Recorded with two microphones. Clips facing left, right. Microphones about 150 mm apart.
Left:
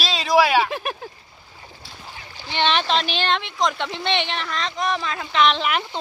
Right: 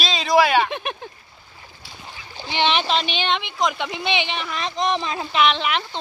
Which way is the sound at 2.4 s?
15° right (ahead or behind).